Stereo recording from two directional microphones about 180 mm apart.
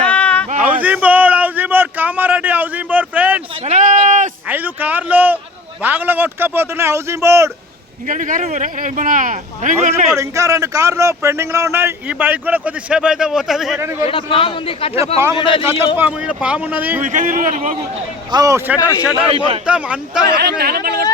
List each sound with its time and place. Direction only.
0.0 s a sound: 5° left (ahead or behind)
0.6 s a sound: 10° right (ahead or behind)
3.7 s a sound: 45° right (ahead or behind)
4.4 s speech: 10° right (ahead or behind)
8.0 s speech: 45° right (ahead or behind)
10.2 s speech: 15° right (ahead or behind); by 13.7 s centre (ahead or behind)
13.7 s speech: 15° right (ahead or behind)
14.1 s a man's voice: 30° left (ahead or behind)
16.0 s speech: 5° right (ahead or behind)
17.0 s speech: 45° right (ahead or behind)
18.3 s speech: 20° right (ahead or behind)
18.8 s a man's voice: 20° left (ahead or behind)
19.6 s speech: 5° right (ahead or behind)
20.4 s speech: 60° right (ahead or behind)